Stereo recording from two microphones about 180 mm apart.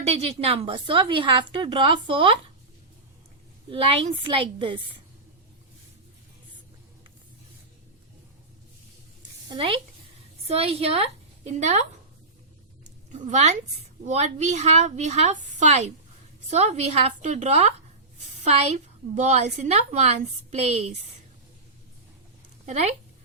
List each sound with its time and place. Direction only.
0.0 s a woman's voice: 35° right (ahead or behind)
3.7 s a woman's voice: 30° right (ahead or behind)
9.5 s a woman's voice: 30° right (ahead or behind)
12.8 s a sound: 40° right (ahead or behind)
14.0 s a woman's voice: 40° right (ahead or behind)
22.6 s a woman's voice: 35° right (ahead or behind)